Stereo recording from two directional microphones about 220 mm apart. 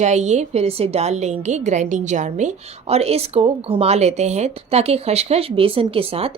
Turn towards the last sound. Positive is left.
turn(degrees=-25)  # may be behind; listen again after turning